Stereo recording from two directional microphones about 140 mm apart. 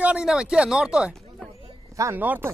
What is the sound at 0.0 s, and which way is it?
Speech, 5° right (ahead or behind).